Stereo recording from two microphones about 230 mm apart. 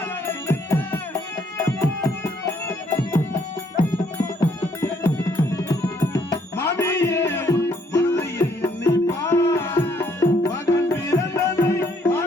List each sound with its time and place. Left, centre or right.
0.3 s music: centre
4.2 s music: centre